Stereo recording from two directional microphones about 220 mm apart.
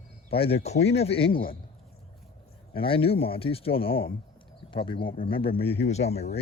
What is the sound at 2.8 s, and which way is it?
Speech, 25° left (ahead or behind).